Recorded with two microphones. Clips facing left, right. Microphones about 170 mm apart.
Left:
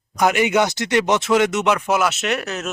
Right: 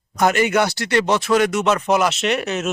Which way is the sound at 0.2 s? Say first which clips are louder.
Even; 10° left (ahead or behind).